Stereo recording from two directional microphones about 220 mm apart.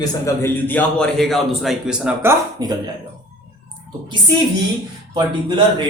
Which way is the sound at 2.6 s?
15° right (ahead or behind).